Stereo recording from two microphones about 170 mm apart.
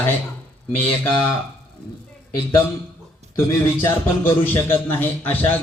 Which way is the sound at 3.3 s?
15° left (ahead or behind).